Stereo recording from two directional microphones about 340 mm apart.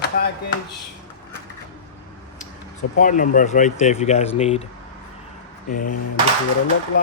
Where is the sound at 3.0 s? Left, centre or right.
Left.